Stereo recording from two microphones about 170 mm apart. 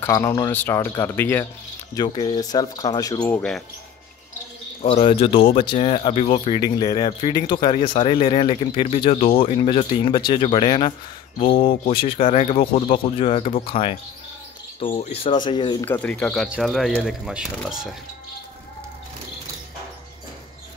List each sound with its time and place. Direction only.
0.0 s speech: 15° left (ahead or behind)
2.0 s speech: 25° left (ahead or behind)
3.3 s speech: 10° left (ahead or behind)
4.8 s speech: 30° left (ahead or behind)
6.5 s speech: 20° left (ahead or behind); by 15.4 s 40° left (ahead or behind)
15.4 s speech: 25° left (ahead or behind)
15.8 s speech: 10° left (ahead or behind)